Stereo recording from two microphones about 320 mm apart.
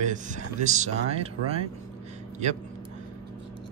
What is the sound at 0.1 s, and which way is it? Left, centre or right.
Speech, right.